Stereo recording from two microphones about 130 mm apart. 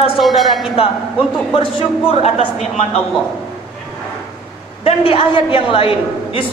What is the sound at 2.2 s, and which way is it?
Speech, 55° left (ahead or behind).